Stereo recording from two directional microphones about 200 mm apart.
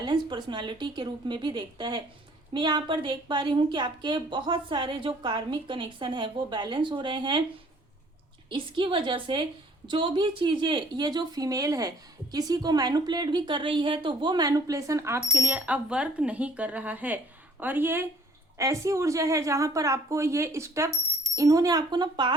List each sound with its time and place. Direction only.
0.0 s a woman's voice: 20° right (ahead or behind)
8.4 s a woman's voice: 25° right (ahead or behind)